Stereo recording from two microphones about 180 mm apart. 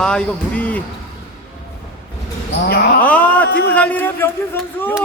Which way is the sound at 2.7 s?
60° left (ahead or behind).